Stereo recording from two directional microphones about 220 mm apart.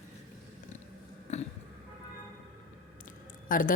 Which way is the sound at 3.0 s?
40° left (ahead or behind).